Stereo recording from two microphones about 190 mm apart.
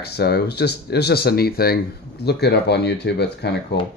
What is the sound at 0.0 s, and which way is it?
Speech, 55° left (ahead or behind).